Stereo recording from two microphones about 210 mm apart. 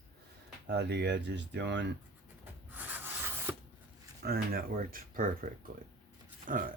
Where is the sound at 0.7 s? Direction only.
50° right (ahead or behind).